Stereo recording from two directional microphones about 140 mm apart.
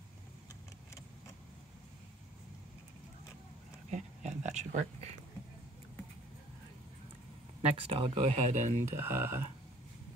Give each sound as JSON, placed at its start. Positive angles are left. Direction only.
{"t": 3.9, "sound": "a sound", "side_deg": -60}
{"t": 7.7, "sound": "speech", "side_deg": -40}
{"t": 8.8, "sound": "speech", "side_deg": -15}